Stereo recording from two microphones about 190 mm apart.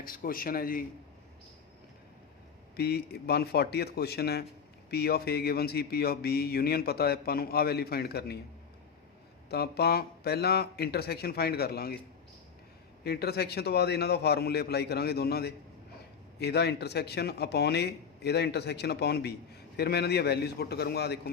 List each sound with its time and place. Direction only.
0.0 s speech: 50° left (ahead or behind)
2.7 s a man's voice: 55° left (ahead or behind)
9.5 s a man's voice: 55° left (ahead or behind)
13.1 s a man's voice: 55° left (ahead or behind)